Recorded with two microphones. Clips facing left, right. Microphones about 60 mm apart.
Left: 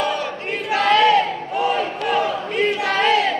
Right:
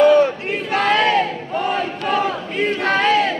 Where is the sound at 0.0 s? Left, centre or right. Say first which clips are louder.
Right 11 dB; right.